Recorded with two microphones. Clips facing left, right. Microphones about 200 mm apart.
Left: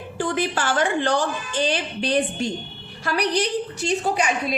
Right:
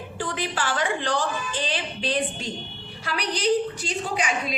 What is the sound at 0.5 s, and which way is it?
A woman's voice, 45° left (ahead or behind).